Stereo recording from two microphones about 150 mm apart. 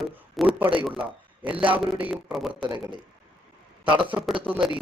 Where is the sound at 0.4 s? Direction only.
Centre (ahead or behind).